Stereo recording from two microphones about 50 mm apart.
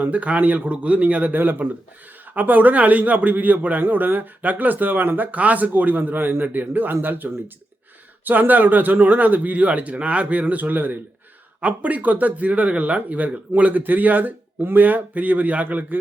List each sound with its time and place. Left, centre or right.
0.0 s a man's voice: right